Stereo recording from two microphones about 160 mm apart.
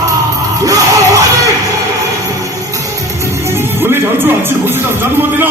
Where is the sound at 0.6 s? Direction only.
20° right (ahead or behind).